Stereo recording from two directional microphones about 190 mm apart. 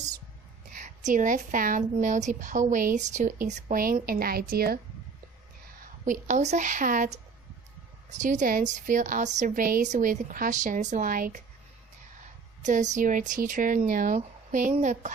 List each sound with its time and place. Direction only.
0.7 s a woman's voice: 45° right (ahead or behind)
5.8 s a woman's voice: 45° right (ahead or behind)
12.6 s a woman's voice: 40° right (ahead or behind)